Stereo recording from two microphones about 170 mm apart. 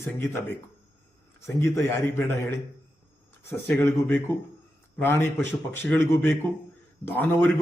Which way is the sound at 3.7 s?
10° left (ahead or behind).